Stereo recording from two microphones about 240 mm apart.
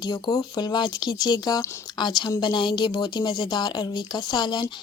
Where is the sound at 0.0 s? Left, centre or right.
Centre.